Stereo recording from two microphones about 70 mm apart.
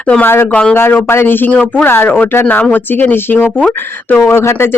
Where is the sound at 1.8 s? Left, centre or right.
Left.